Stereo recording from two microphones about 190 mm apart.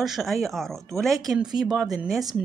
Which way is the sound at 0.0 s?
Centre (ahead or behind).